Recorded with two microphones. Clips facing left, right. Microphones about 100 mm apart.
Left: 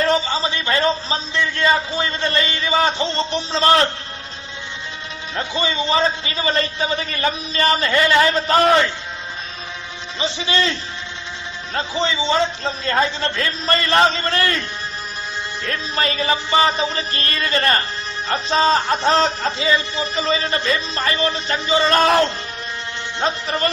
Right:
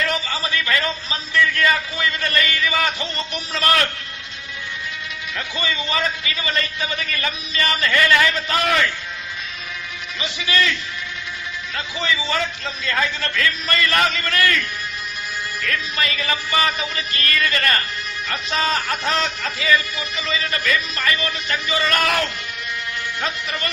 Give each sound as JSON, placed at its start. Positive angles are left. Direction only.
{"t": 0.0, "sound": "a man's voice", "side_deg": 30}
{"t": 5.4, "sound": "speech", "side_deg": 30}
{"t": 10.2, "sound": "a man's voice", "side_deg": 30}